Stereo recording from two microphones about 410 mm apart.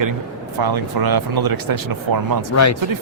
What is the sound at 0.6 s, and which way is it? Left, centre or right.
Speech, right.